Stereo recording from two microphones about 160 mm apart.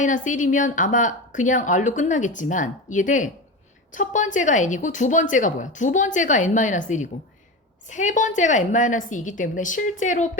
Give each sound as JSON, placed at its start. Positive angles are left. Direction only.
{"t": 0.0, "sound": "speech", "side_deg": 50}